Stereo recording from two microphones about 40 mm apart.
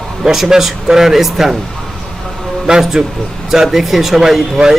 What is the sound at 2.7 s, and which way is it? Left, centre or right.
Speech, centre.